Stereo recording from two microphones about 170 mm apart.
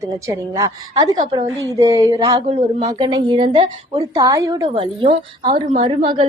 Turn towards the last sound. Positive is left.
turn(degrees=-35)  # may be behind; listen again after turning